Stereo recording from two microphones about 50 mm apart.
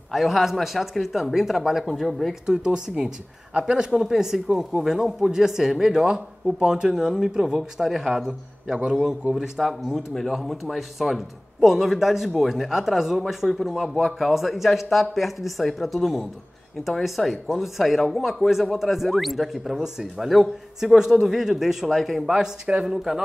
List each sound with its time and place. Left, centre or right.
0.1 s speech: centre
2.4 s speech: centre
9.6 s speech: centre
22.3 s speech: centre